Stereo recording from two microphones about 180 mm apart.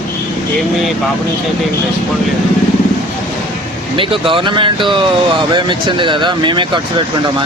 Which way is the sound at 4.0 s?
30° right (ahead or behind).